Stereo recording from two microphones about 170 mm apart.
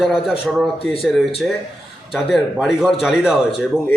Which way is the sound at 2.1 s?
Centre (ahead or behind).